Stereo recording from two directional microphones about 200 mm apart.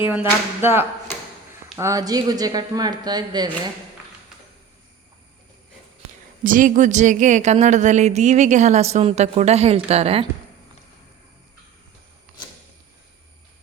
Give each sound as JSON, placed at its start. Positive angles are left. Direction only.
{"t": 0.6, "sound": "a woman's voice", "side_deg": -10}
{"t": 6.4, "sound": "speech", "side_deg": -40}